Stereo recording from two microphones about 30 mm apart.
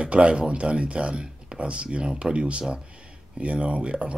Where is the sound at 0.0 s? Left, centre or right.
Right.